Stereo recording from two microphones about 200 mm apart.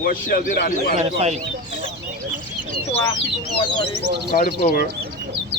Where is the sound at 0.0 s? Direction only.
45° left (ahead or behind).